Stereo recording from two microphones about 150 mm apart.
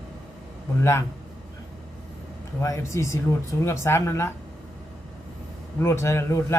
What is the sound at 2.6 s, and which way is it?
Speech, 20° left (ahead or behind).